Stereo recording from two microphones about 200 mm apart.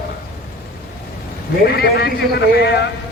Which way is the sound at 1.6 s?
50° left (ahead or behind).